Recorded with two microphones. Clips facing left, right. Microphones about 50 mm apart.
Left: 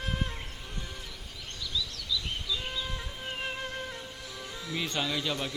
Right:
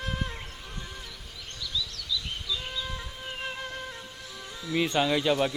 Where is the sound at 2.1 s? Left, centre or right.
Centre.